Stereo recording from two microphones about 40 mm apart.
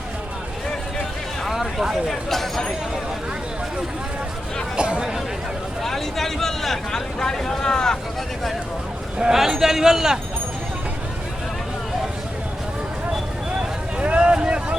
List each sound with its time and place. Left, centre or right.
1.5 s a sound: centre
2.0 s speech: centre
4.8 s chatter: right
5.8 s speech: centre
9.3 s speech: centre
14.0 s boat: right